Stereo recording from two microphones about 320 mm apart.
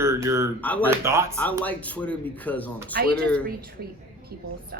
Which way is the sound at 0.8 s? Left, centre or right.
Centre.